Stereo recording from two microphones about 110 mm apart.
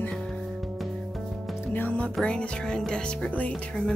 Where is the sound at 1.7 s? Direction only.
15° left (ahead or behind).